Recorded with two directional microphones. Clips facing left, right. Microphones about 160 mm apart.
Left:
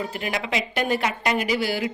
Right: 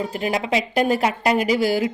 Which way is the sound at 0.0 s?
35° right (ahead or behind).